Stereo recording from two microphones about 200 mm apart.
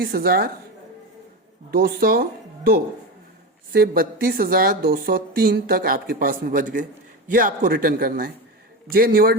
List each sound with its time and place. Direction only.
0.0 s speech: 50° right (ahead or behind)
1.7 s speech: 50° right (ahead or behind)
3.7 s speech: 50° right (ahead or behind)